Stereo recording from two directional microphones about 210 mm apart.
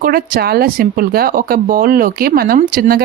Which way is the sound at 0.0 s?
45° right (ahead or behind).